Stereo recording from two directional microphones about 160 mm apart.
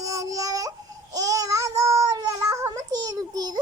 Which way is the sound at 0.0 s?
20° right (ahead or behind).